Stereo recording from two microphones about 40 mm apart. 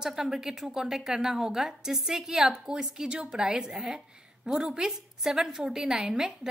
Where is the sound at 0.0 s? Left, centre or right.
Centre.